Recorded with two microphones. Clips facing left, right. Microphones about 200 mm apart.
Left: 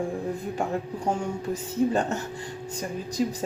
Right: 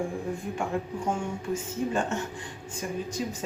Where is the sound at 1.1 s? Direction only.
35° left (ahead or behind).